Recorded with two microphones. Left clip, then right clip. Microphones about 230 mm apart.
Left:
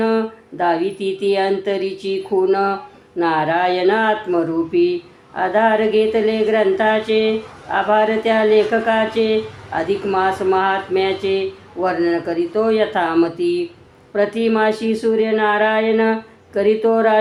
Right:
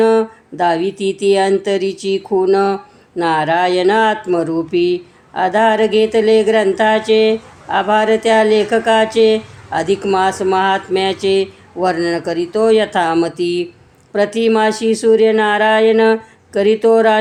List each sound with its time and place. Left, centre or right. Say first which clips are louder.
0.0 s speech: right 6 dB; right